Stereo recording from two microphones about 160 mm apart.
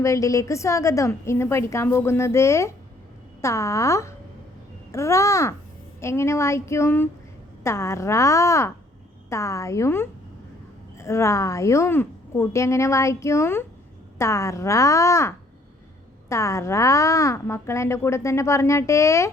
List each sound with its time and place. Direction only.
0.0 s a woman's voice: 20° left (ahead or behind)